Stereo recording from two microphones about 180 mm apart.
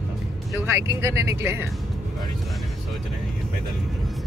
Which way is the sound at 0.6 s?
15° right (ahead or behind).